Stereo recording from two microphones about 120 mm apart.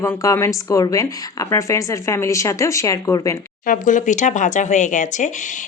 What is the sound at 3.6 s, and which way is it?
Speech, 90° left.